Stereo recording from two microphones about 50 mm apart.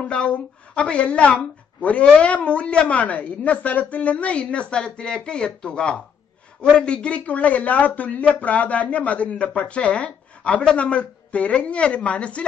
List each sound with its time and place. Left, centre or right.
0.0 s a woman's voice: left